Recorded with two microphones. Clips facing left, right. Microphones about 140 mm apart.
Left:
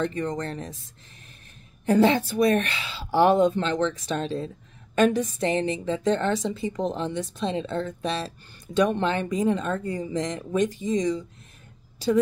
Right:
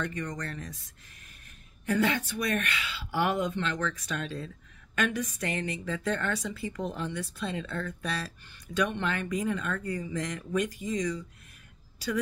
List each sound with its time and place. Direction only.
0.0 s a woman's voice: 25° left (ahead or behind)
1.9 s a woman's voice: 30° left (ahead or behind)